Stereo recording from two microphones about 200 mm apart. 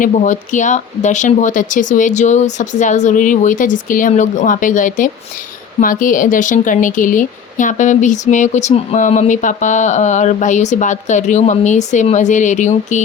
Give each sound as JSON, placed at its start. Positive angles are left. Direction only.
{"t": 0.0, "sound": "speech", "side_deg": 40}